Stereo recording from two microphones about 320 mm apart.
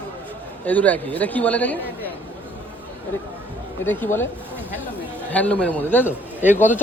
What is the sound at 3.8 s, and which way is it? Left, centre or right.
Speech, centre.